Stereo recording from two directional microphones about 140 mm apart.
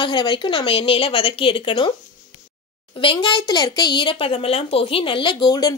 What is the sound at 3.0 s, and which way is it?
A woman's voice, 35° left (ahead or behind).